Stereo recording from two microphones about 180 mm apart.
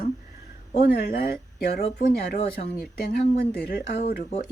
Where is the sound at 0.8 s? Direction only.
65° left (ahead or behind).